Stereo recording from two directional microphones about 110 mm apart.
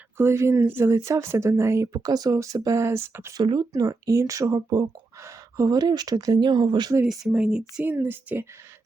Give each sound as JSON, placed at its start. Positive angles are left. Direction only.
{"t": 0.2, "sound": "speech", "side_deg": -25}
{"t": 3.3, "sound": "speech", "side_deg": -40}
{"t": 3.7, "sound": "speech", "side_deg": -30}
{"t": 7.1, "sound": "a sound", "side_deg": -5}
{"t": 7.9, "sound": "speech", "side_deg": -20}